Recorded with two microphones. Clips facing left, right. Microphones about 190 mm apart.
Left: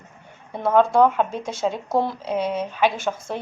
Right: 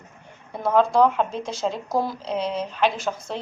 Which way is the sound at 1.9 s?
25° left (ahead or behind).